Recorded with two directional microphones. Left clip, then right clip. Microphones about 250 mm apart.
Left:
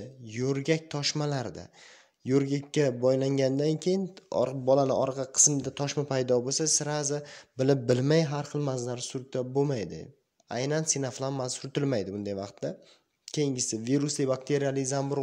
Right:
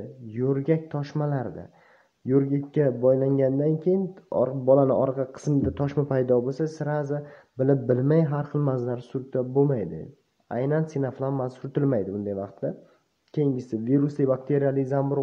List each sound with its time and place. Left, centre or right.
0.4 s speech: left
6.3 s speech: left